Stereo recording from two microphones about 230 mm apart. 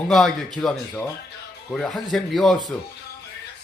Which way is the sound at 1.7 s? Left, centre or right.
Centre.